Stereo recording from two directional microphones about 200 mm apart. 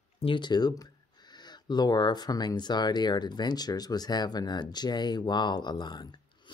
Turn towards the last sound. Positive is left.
turn(degrees=20)  # may be behind; listen again after turning